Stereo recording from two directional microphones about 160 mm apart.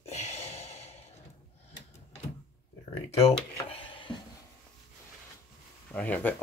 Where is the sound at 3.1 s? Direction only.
40° left (ahead or behind).